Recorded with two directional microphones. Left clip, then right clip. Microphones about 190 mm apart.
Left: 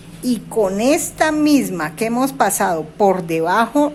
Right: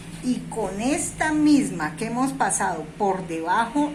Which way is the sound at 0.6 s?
60° left (ahead or behind).